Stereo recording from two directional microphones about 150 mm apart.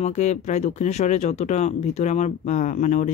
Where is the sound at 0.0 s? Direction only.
50° left (ahead or behind).